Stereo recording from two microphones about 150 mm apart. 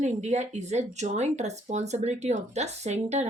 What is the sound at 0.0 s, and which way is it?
Speech, 50° right (ahead or behind).